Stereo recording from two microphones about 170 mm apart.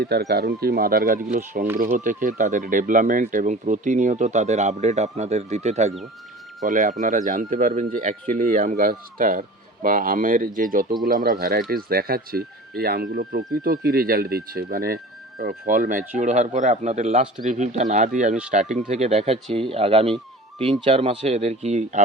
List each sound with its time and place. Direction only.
0.0 s speech: 70° right (ahead or behind); by 5.9 s 40° right (ahead or behind)
6.7 s speech: 50° right (ahead or behind)